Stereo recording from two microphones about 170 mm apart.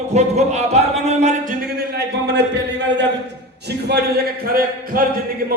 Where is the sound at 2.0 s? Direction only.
80° right.